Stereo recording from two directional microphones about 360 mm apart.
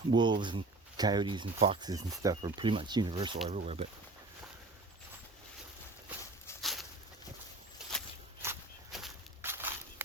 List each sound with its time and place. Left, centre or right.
0.1 s speech: centre
6.6 s a sound: centre
7.9 s walk: centre